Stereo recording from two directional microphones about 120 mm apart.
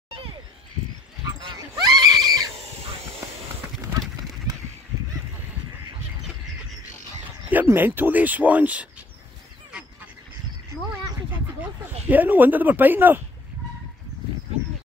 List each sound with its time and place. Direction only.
1.4 s neigh: 35° right (ahead or behind)
4.5 s a sound: 30° right (ahead or behind)
7.4 s speech: 15° right (ahead or behind)
11.6 s speech: 15° right (ahead or behind)